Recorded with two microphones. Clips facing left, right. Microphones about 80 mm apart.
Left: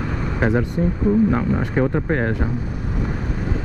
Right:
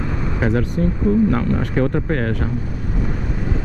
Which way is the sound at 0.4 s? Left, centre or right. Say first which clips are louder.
Even; centre.